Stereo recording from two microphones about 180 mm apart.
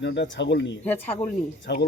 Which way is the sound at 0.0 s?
75° left (ahead or behind).